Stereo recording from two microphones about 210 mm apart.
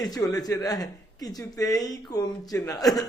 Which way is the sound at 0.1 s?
15° left (ahead or behind).